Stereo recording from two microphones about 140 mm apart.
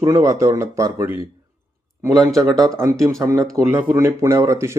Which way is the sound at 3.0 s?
20° right (ahead or behind).